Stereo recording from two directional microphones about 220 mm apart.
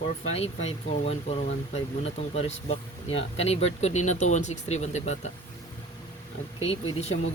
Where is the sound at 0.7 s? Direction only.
30° left (ahead or behind).